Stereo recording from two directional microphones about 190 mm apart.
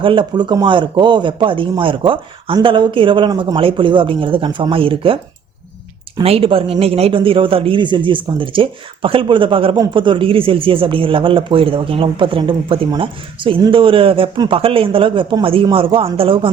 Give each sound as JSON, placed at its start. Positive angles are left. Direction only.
{"t": 0.0, "sound": "speech", "side_deg": -25}
{"t": 6.2, "sound": "speech", "side_deg": -30}